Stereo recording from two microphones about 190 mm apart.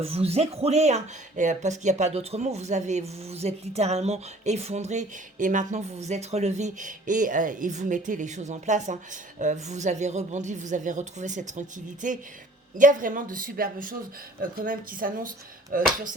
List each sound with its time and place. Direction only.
0.0 s a woman's voice: 30° right (ahead or behind); by 15.9 s 45° right (ahead or behind)